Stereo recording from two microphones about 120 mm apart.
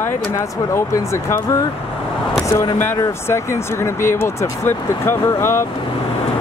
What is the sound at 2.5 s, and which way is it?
Speech, 20° left (ahead or behind).